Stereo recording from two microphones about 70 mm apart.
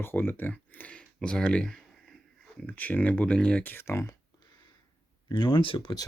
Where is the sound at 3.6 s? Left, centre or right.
Left.